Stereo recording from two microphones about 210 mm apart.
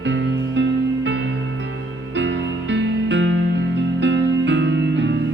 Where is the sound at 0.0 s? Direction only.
60° right (ahead or behind).